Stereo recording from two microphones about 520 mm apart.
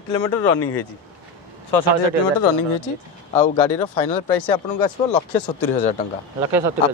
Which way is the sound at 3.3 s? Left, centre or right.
Centre.